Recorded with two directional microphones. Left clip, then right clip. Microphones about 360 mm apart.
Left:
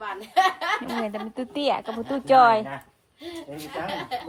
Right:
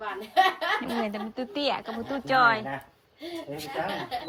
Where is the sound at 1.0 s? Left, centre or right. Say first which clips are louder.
Left 1 dB; centre.